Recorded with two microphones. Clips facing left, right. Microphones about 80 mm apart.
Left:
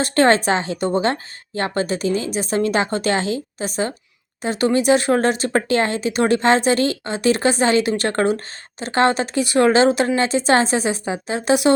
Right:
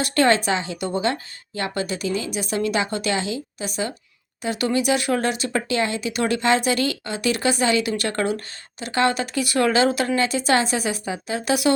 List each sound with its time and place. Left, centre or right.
0.0 s a woman's voice: left